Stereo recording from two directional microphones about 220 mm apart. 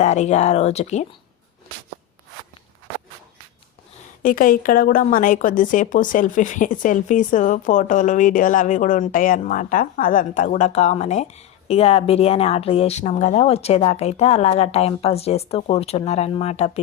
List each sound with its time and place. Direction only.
0.0 s a woman's voice: 30° left (ahead or behind)
4.2 s a woman's voice: 40° left (ahead or behind)